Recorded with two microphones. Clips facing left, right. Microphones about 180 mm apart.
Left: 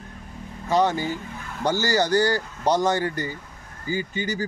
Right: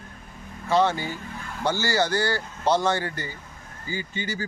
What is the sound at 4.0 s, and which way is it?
Speech, 40° left (ahead or behind).